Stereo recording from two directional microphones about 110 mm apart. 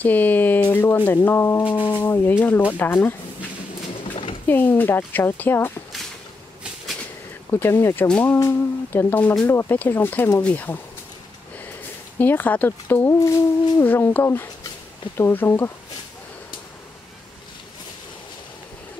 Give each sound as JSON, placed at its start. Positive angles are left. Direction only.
{"t": 0.0, "sound": "speech", "side_deg": 15}
{"t": 4.0, "sound": "a sound", "side_deg": 55}
{"t": 4.5, "sound": "speech", "side_deg": 20}
{"t": 7.5, "sound": "speech", "side_deg": 20}
{"t": 12.2, "sound": "speech", "side_deg": 15}